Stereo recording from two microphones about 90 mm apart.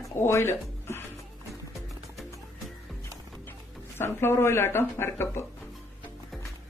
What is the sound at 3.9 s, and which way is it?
Speech, 30° left (ahead or behind).